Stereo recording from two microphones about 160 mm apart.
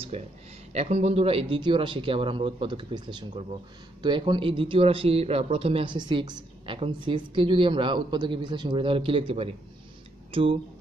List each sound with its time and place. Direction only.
0.1 s a man's voice: 40° right (ahead or behind)